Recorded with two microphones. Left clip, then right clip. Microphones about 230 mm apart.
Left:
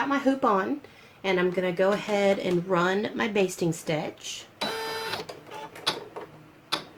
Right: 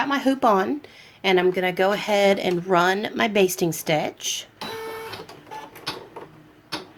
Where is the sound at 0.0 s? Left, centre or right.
Right.